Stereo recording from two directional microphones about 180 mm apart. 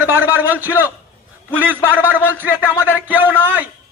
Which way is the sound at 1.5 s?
10° right (ahead or behind).